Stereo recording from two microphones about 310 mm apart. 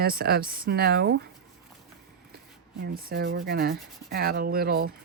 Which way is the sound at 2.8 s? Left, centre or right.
Right.